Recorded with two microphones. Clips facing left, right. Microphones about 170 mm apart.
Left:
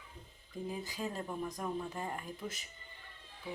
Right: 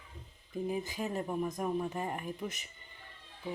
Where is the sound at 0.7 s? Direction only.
20° right (ahead or behind).